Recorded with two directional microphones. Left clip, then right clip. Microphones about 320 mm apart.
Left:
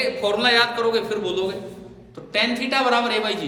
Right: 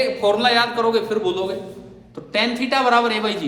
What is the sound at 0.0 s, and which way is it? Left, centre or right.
A man's voice, centre.